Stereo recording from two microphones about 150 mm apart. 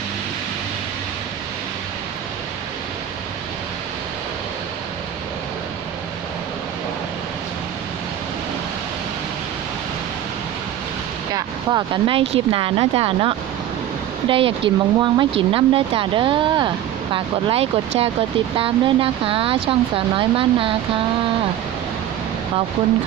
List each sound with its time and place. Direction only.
11.3 s speech: 30° right (ahead or behind)